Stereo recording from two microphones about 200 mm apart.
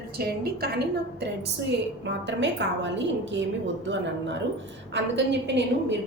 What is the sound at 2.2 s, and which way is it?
A woman's voice, 60° right (ahead or behind).